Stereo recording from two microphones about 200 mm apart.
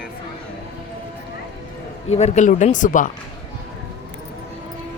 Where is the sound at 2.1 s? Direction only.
35° left (ahead or behind).